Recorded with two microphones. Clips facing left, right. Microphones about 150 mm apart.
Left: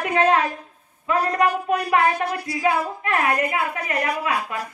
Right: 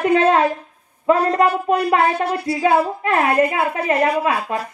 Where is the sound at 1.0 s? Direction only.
30° right (ahead or behind).